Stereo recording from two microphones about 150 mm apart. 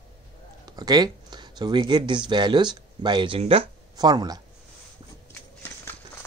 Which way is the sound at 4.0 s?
25° right (ahead or behind).